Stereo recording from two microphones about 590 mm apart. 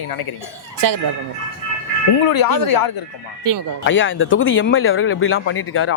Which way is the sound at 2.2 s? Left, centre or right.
Left.